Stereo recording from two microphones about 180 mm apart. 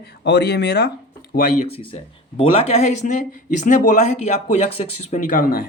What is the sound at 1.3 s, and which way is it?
Speech, 50° left (ahead or behind).